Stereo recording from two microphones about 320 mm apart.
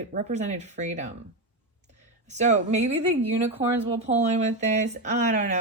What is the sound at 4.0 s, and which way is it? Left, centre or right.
Speech, right.